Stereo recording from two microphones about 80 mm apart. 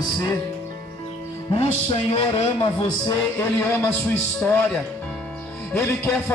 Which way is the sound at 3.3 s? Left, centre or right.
Left.